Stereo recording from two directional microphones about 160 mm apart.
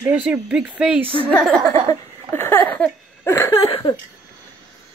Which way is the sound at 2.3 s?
15° left (ahead or behind).